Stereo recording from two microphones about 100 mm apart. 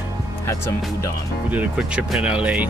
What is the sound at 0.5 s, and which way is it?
Speech, 30° left (ahead or behind).